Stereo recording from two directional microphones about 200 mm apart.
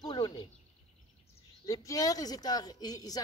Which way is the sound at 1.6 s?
15° left (ahead or behind).